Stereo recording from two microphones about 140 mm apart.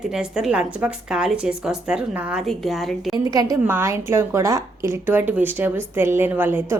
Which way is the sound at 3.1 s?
30° right (ahead or behind).